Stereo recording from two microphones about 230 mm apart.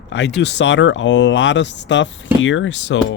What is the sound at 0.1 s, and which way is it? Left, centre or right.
Speech, left.